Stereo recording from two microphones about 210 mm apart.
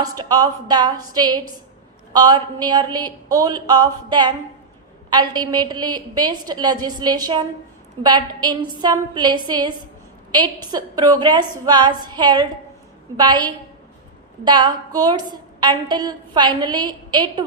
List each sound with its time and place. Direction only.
0.2 s a woman's voice: 20° right (ahead or behind)